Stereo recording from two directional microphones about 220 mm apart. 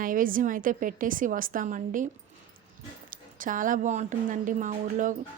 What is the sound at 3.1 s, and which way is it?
A woman's voice, 40° right (ahead or behind).